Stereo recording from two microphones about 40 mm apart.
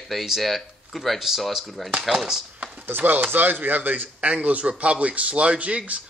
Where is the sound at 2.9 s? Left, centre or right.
Right.